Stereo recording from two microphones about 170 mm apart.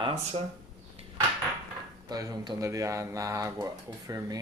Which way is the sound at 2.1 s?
20° right (ahead or behind).